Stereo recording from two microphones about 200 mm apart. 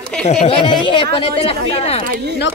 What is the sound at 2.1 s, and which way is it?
Speech, 55° right (ahead or behind).